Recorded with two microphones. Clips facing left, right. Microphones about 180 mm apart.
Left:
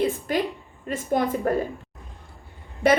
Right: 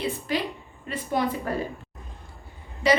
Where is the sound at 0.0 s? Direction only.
50° left (ahead or behind).